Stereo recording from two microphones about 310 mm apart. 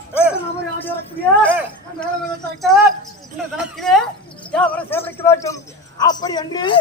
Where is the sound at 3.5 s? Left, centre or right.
Centre.